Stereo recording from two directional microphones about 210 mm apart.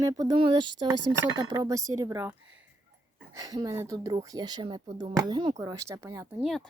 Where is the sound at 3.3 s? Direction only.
15° right (ahead or behind).